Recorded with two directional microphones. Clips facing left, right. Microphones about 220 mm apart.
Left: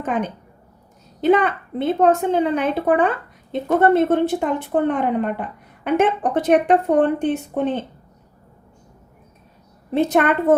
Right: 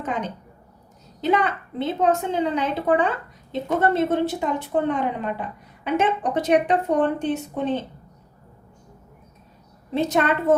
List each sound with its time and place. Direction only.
0.0 s a woman's voice: 55° left (ahead or behind)
9.9 s a woman's voice: 55° left (ahead or behind)